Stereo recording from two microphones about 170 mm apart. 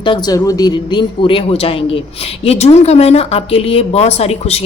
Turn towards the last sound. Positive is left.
turn(degrees=40)  # may be behind; listen again after turning